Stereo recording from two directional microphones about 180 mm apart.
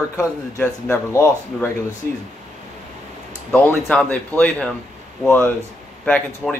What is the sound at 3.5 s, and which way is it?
Speech, 10° left (ahead or behind).